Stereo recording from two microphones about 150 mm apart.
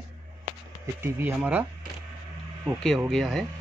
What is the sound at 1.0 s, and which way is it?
Speech, 15° right (ahead or behind).